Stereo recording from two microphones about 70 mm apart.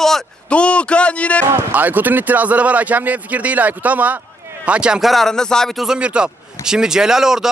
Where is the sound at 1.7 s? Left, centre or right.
Right.